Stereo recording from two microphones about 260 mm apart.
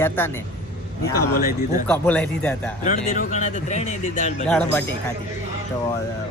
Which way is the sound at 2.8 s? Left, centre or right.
Left.